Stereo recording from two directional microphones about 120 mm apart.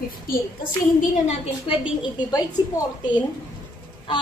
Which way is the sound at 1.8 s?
35° left (ahead or behind).